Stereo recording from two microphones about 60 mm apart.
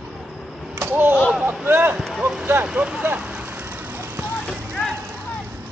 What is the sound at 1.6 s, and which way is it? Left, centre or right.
Speech, right.